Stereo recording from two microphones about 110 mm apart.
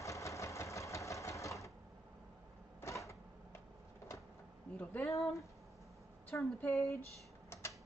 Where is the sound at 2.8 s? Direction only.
25° left (ahead or behind).